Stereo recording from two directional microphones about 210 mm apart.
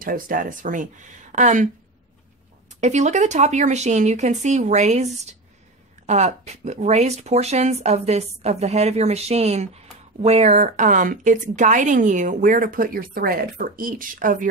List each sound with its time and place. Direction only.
0.0 s speech: 40° right (ahead or behind)
2.8 s speech: 35° right (ahead or behind)